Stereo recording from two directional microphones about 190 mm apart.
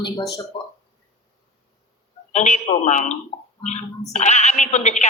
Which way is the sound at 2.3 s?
40° left (ahead or behind).